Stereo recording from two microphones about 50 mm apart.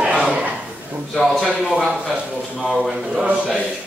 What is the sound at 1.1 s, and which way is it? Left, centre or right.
Speech, centre.